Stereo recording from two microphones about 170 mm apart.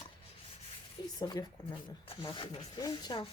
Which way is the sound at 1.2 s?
25° left (ahead or behind).